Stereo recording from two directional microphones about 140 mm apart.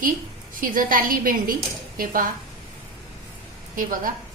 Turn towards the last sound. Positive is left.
turn(degrees=-80)